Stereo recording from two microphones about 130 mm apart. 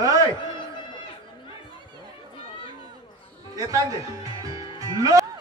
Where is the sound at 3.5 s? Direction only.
30° right (ahead or behind).